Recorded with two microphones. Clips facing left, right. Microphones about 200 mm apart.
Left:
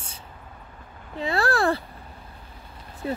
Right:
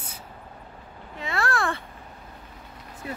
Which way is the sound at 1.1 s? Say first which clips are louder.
Left 4 dB; 35° left (ahead or behind).